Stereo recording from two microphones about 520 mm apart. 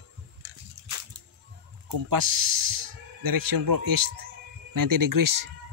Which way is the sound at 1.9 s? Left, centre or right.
Right.